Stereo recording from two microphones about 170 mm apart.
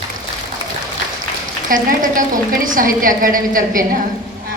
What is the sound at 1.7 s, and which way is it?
A woman's voice, 50° right (ahead or behind).